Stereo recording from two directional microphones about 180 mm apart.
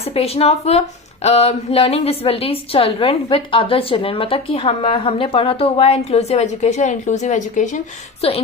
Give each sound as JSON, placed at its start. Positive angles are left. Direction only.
{"t": 0.0, "sound": "a woman's voice", "side_deg": 35}
{"t": 8.2, "sound": "a woman's voice", "side_deg": 35}